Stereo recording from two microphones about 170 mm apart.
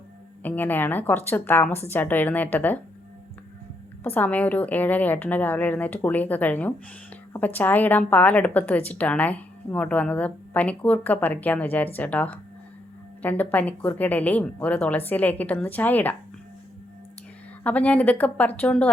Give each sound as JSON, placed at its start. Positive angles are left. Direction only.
{"t": 0.4, "sound": "a woman's voice", "side_deg": 10}
{"t": 4.0, "sound": "a woman's voice", "side_deg": 10}
{"t": 17.6, "sound": "a woman's voice", "side_deg": 10}